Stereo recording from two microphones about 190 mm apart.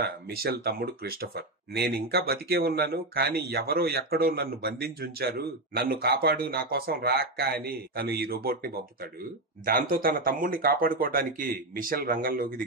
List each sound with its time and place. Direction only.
0.0 s speech: 55° right (ahead or behind)